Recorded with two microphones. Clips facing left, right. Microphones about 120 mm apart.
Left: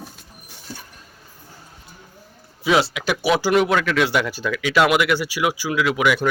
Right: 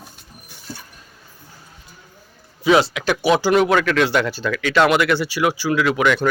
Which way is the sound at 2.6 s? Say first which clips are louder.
Right 3 dB; 5° left (ahead or behind).